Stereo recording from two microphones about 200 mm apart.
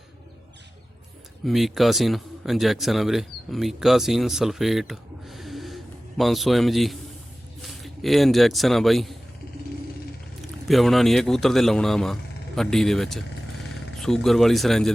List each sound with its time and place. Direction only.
1.5 s a man's voice: centre (ahead or behind)
10.7 s a man's voice: centre (ahead or behind)